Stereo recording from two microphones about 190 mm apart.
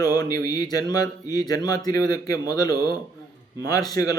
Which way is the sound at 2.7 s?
55° right (ahead or behind).